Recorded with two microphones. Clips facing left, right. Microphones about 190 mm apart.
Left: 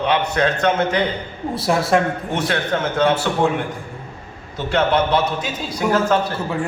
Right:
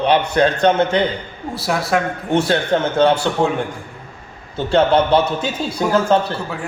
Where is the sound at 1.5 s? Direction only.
Centre (ahead or behind).